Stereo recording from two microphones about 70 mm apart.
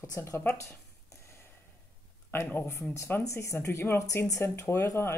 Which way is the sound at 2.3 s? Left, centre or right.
Left.